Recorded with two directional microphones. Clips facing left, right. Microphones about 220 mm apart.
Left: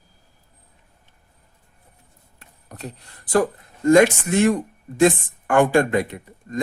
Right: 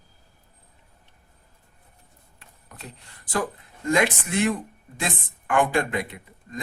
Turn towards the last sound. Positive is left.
turn(degrees=40)  # may be behind; listen again after turning